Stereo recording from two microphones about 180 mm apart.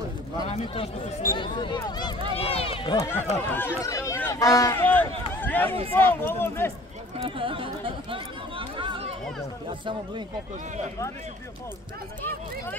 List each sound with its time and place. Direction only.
0.4 s speech: 30° left (ahead or behind)
3.4 s speech: 10° left (ahead or behind)
7.2 s speech: 30° right (ahead or behind)
12.2 s speech: 10° left (ahead or behind)